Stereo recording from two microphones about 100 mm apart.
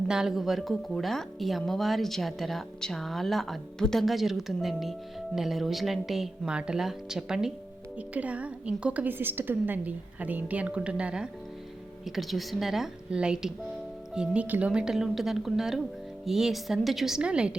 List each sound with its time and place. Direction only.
0.1 s a woman's voice: 5° right (ahead or behind)